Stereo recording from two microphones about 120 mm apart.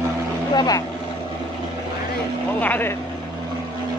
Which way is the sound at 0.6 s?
30° left (ahead or behind).